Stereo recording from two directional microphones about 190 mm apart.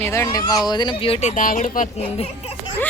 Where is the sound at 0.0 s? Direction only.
15° left (ahead or behind); by 2.7 s 30° left (ahead or behind).